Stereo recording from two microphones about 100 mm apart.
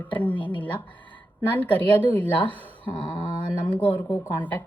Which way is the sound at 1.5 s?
15° left (ahead or behind).